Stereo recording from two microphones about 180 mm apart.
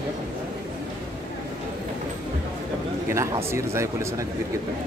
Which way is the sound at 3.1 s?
15° right (ahead or behind).